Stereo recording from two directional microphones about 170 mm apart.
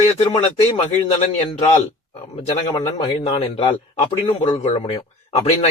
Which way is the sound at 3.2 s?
35° left (ahead or behind).